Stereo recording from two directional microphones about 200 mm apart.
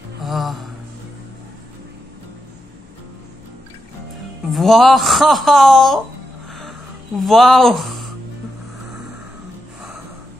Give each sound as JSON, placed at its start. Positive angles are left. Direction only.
{"t": 0.2, "sound": "mantra", "side_deg": 0}
{"t": 4.5, "sound": "speech", "side_deg": 0}
{"t": 7.2, "sound": "speech", "side_deg": 0}